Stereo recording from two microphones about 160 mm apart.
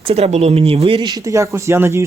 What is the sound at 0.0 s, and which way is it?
Speech, 40° right (ahead or behind).